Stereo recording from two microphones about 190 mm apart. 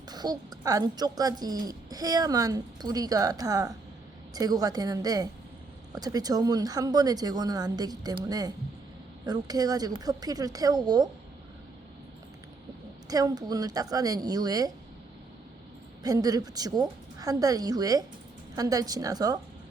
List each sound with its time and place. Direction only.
0.1 s a woman's voice: 20° right (ahead or behind)
13.1 s a woman's voice: 20° right (ahead or behind)
16.0 s a woman's voice: 20° right (ahead or behind)